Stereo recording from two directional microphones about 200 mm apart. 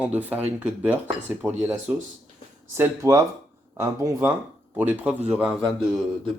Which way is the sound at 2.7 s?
15° right (ahead or behind).